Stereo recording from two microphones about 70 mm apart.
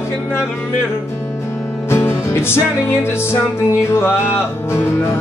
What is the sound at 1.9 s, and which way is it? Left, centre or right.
Music, left.